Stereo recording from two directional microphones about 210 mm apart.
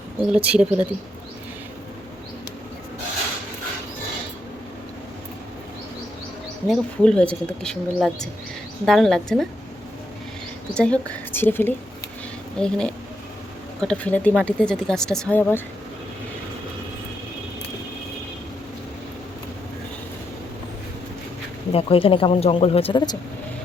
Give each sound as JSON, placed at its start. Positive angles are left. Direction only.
{"t": 0.3, "sound": "speech", "side_deg": -5}
{"t": 6.7, "sound": "speech", "side_deg": 5}
{"t": 10.8, "sound": "a woman's voice", "side_deg": 5}
{"t": 21.7, "sound": "speech", "side_deg": 25}